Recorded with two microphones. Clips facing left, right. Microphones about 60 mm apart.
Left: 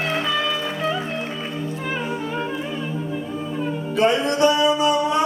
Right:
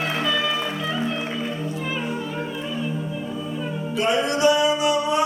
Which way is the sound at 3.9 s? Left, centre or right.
Left.